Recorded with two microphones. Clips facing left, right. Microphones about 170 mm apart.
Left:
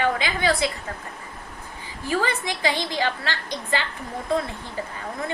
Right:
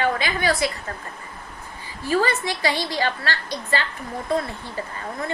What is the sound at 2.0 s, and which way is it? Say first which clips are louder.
A woman's voice: right 3 dB; 15° left (ahead or behind).